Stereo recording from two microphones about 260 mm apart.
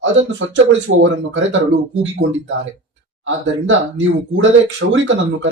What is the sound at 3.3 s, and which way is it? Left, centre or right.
Speech, right.